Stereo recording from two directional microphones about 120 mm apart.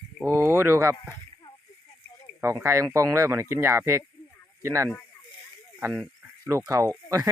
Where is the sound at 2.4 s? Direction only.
25° right (ahead or behind).